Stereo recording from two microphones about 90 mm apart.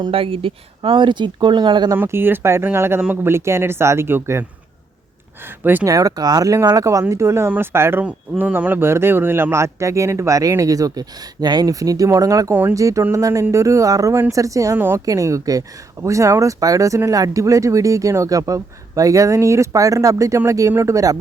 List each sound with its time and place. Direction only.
0.1 s speech: 90° right; by 1.9 s 55° right (ahead or behind)
2.0 s speech: 25° right (ahead or behind)
5.8 s speech: 40° right (ahead or behind)
14.8 s speech: 25° right (ahead or behind)
15.0 s speech: 40° right (ahead or behind)